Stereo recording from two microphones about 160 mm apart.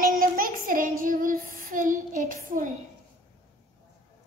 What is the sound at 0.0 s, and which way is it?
Child singing, 65° right (ahead or behind).